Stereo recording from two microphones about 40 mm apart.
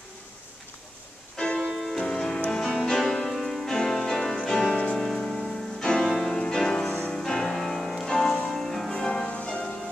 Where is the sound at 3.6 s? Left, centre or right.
Centre.